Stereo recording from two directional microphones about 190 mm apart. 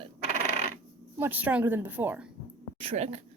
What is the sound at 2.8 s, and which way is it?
Speech, 35° right (ahead or behind).